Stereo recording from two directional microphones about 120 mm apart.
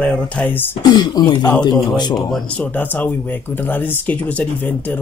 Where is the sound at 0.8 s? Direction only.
35° left (ahead or behind).